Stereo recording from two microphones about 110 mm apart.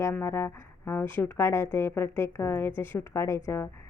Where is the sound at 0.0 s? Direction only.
25° left (ahead or behind).